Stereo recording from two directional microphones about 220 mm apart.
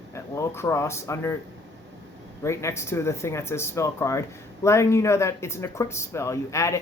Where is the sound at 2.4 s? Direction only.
10° left (ahead or behind).